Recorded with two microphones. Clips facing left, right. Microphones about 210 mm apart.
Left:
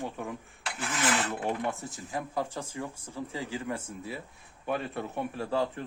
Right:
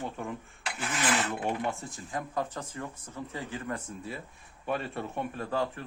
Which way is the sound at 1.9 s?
10° left (ahead or behind).